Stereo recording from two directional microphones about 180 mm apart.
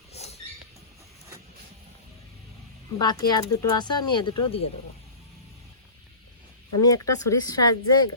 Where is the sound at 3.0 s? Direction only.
25° left (ahead or behind).